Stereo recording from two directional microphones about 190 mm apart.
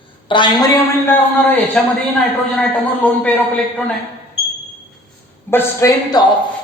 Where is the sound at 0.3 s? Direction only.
25° left (ahead or behind).